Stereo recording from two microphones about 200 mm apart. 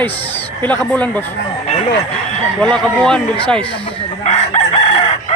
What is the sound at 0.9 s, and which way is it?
Speech, 10° left (ahead or behind).